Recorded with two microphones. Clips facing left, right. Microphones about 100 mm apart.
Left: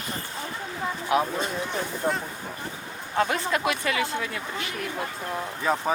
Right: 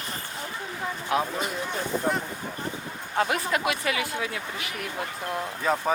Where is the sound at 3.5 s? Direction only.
25° right (ahead or behind).